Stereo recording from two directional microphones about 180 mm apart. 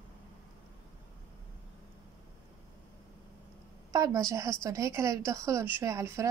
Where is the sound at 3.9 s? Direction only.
20° right (ahead or behind).